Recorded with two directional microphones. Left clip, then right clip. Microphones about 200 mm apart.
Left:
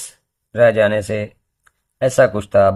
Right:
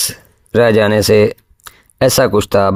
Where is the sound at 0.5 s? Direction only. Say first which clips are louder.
Right 3 dB; 45° right (ahead or behind).